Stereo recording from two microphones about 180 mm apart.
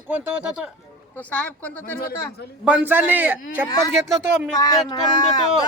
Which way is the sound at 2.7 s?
10° right (ahead or behind).